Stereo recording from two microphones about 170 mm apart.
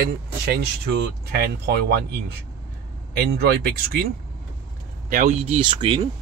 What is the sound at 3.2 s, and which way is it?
Speech, 70° right (ahead or behind).